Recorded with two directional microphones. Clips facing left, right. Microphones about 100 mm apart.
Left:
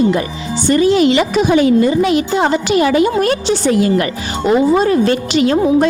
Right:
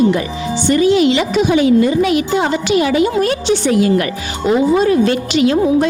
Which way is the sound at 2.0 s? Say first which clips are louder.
Left 1 dB; 30° left (ahead or behind).